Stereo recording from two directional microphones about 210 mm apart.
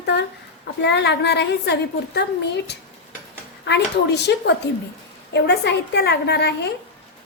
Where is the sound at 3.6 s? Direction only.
55° left (ahead or behind).